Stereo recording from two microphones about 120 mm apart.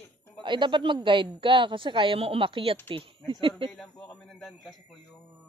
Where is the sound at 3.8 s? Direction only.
5° left (ahead or behind).